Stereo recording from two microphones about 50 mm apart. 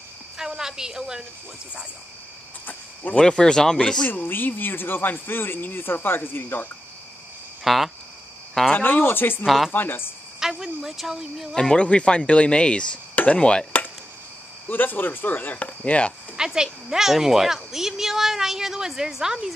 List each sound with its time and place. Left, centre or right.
0.4 s a woman's voice: centre
2.6 s cricket: left
3.2 s speech: centre
4.1 s speech: left
7.6 s speech: centre
8.7 s speech: left
10.4 s speech: centre
11.7 s speech: left
13.1 s chop: left
14.7 s speech: left
16.3 s speech: centre